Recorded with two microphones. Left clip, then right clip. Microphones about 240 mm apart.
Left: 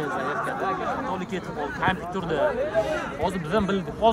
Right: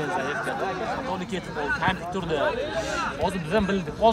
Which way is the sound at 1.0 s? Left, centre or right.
Right.